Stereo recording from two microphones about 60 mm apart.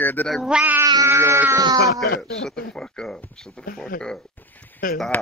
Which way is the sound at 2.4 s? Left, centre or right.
Centre.